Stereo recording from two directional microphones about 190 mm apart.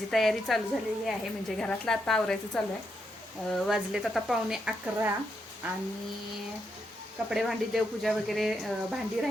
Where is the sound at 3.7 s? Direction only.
Centre (ahead or behind).